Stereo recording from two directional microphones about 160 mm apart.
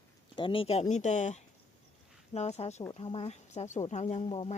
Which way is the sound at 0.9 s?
50° left (ahead or behind).